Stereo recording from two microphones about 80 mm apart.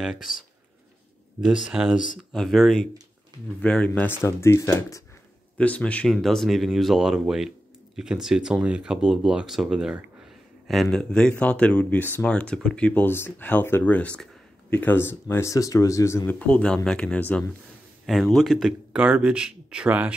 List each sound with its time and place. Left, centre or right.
0.0 s speech: centre
1.5 s speech: centre
2.3 s speech: centre
3.6 s speech: centre
4.1 s speech: left
5.6 s speech: centre
6.0 s speech: centre
10.7 s speech: centre; by 15.5 s left
15.5 s speech: left
16.3 s speech: centre
18.0 s speech: centre
18.9 s speech: centre